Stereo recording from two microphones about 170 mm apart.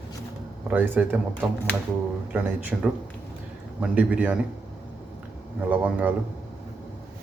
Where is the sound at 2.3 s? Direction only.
10° right (ahead or behind).